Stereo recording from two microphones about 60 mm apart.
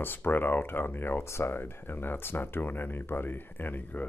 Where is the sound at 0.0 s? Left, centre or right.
Left.